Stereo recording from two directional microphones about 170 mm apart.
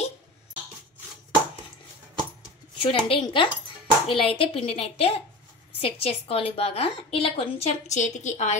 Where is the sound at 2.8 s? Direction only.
30° left (ahead or behind).